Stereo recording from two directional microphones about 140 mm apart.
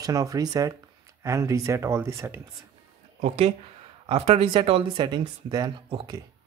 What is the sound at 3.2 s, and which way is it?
Speech, 50° right (ahead or behind).